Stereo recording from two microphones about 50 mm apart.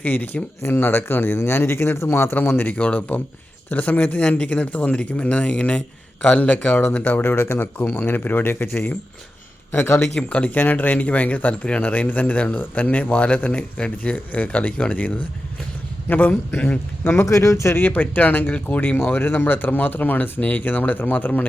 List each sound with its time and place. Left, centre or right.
0.0 s speech: left
0.6 s a man's voice: left
2.3 s speech: left
2.6 s speech: left
9.7 s speech: left
10.2 s speech: left
16.0 s speech: left
17.0 s speech: left
17.2 s speech: left
17.7 s speech: left
19.1 s speech: left